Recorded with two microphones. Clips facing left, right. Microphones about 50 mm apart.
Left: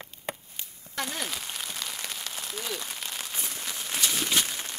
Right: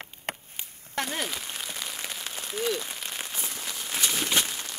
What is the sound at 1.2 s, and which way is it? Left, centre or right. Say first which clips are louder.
Rain on surface: right 1 dB; centre.